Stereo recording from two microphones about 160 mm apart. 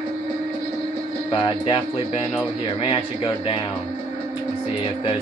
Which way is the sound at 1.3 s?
30° left (ahead or behind).